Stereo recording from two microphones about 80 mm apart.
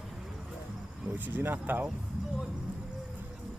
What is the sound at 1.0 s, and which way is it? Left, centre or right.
Speech, right.